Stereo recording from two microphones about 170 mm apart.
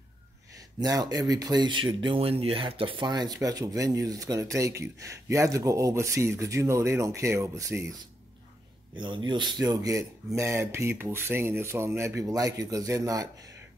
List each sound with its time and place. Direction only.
0.7 s speech: 20° right (ahead or behind)
8.9 s speech: 30° right (ahead or behind)